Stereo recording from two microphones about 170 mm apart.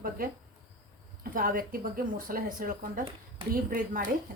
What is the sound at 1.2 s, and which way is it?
A woman's voice, 55° right (ahead or behind).